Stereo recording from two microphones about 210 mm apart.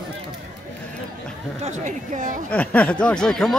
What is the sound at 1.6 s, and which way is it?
Speech, 35° right (ahead or behind).